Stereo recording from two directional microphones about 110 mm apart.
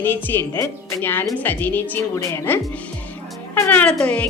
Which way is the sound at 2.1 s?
30° left (ahead or behind).